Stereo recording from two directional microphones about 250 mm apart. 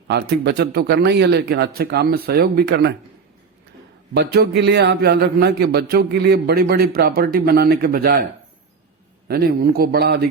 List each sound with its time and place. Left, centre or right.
0.1 s a man's voice: right
4.1 s a man's voice: right